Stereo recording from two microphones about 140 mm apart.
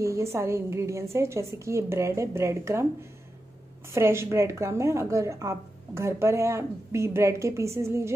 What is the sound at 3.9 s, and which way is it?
A woman's voice, 20° right (ahead or behind).